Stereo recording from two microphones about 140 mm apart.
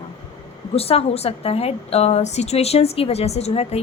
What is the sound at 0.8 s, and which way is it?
A woman's voice, 45° left (ahead or behind).